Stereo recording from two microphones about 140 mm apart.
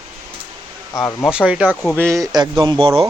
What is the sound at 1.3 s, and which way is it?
Speech, 10° right (ahead or behind).